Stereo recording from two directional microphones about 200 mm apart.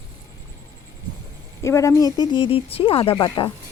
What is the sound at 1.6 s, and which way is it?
Speech, 15° left (ahead or behind).